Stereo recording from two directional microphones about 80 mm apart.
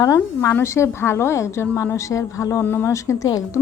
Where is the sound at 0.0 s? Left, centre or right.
Left.